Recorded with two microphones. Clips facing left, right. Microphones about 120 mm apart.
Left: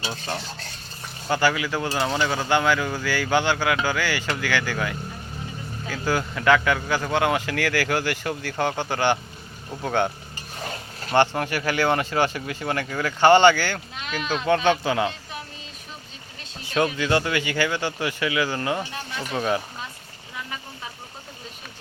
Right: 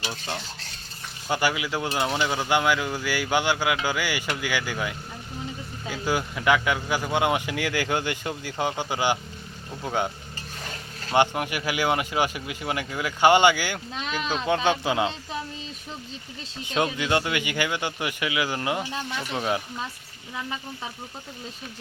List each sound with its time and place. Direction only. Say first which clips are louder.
1.3 s speech: left 3 dB; 15° right (ahead or behind)
10.6 s a sound: left 7 dB; 30° left (ahead or behind)
11.1 s speech: left 2 dB; 10° right (ahead or behind)
16.6 s speech: left 2 dB; 20° right (ahead or behind)